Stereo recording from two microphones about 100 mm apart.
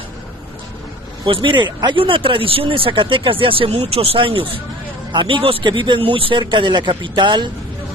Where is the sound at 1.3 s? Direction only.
60° right (ahead or behind).